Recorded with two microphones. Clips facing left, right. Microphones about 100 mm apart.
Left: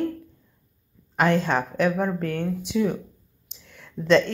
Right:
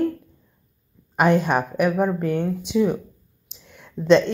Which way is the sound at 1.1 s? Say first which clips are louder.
Right 3 dB; 15° right (ahead or behind).